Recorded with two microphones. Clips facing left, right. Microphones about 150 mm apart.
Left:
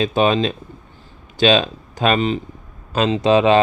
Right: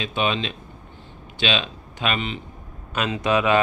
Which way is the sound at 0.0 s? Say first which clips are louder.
Left 8 dB; 40° left (ahead or behind).